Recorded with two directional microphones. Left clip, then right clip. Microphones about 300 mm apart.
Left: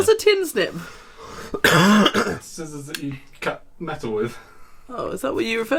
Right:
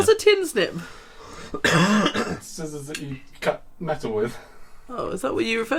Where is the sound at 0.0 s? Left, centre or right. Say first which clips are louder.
Left 1 dB; centre.